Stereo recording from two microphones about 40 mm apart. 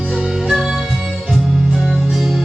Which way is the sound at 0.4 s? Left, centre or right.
Centre.